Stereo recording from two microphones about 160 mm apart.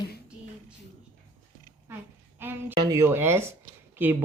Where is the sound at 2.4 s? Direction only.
10° right (ahead or behind).